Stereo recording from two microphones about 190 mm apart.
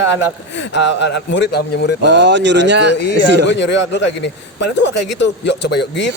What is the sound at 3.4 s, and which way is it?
A man's voice, 70° left (ahead or behind).